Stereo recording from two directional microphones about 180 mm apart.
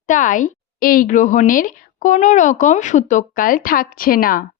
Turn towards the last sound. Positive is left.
turn(degrees=50)  # may be behind; listen again after turning